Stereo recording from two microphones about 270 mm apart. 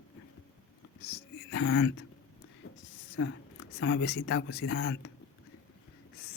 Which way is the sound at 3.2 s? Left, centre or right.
Left.